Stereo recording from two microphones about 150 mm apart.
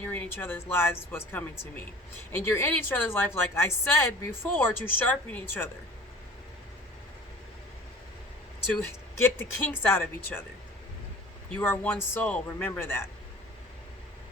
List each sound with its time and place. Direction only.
0.0 s speech: 10° left (ahead or behind)
8.8 s speech: 15° left (ahead or behind)
11.5 s speech: 10° left (ahead or behind)